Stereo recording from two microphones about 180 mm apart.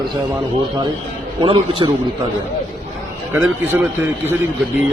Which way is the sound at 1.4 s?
30° right (ahead or behind).